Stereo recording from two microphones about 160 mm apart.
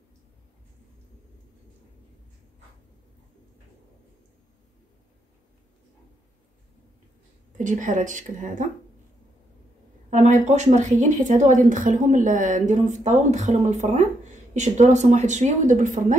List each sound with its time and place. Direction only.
7.5 s a woman's voice: 50° right (ahead or behind)
10.0 s a woman's voice: 45° right (ahead or behind)